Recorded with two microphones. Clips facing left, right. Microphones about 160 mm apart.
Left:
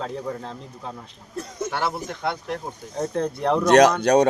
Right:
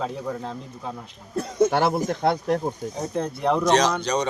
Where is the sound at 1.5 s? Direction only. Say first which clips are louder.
Right 7 dB; 50° right (ahead or behind).